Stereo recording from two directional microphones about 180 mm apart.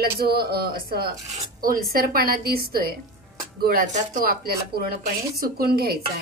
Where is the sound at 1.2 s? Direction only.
45° right (ahead or behind).